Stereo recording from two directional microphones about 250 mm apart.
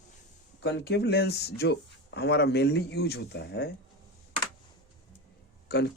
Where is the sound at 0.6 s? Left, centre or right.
Left.